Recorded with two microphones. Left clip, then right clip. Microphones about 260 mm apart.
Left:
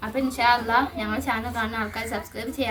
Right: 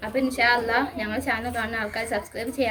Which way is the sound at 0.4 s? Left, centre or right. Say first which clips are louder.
Left 2 dB; centre.